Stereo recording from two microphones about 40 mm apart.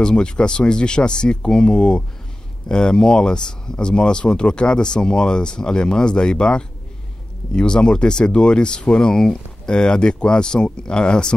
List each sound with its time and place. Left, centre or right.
0.0 s speech: left